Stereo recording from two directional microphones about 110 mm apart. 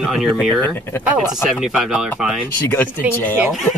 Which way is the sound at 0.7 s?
20° left (ahead or behind).